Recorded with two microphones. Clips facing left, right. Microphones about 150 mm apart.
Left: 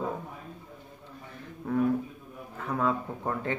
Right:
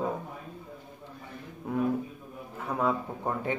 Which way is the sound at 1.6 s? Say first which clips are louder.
Left 2 dB; 15° right (ahead or behind).